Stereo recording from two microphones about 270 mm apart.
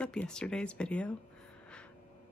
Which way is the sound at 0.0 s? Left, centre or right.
Centre.